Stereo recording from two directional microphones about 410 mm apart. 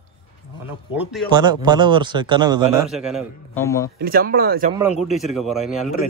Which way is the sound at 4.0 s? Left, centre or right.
Right.